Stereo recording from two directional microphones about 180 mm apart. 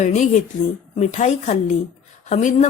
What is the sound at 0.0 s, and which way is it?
A woman's voice, 40° left (ahead or behind).